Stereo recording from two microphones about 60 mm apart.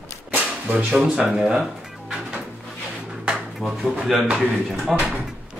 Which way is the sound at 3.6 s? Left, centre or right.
Centre.